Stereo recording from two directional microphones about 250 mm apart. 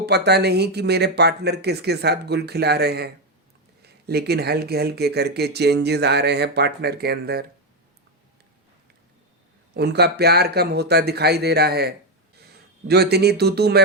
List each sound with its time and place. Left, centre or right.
0.0 s speech: right
9.7 s speech: right